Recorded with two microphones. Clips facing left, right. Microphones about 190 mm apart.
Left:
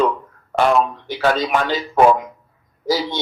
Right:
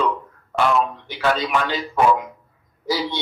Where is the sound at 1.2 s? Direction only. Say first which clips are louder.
Left 3 dB; 40° left (ahead or behind).